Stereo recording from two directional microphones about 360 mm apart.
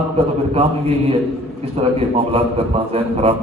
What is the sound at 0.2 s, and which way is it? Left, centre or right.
A man's voice, centre.